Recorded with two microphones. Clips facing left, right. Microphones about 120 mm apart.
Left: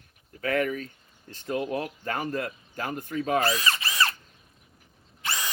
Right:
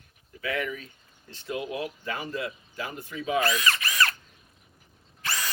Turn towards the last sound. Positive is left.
turn(degrees=20)  # may be behind; listen again after turning